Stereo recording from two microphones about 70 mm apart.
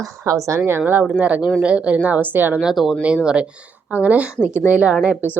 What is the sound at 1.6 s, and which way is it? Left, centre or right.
Speech, centre.